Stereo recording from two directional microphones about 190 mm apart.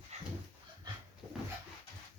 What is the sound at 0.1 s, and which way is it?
Dog, 35° right (ahead or behind).